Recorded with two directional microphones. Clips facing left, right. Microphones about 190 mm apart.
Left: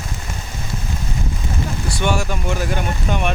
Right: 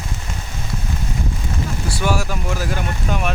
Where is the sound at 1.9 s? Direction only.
5° right (ahead or behind).